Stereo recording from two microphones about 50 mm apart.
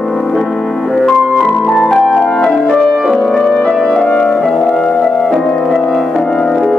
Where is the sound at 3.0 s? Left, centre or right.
Centre.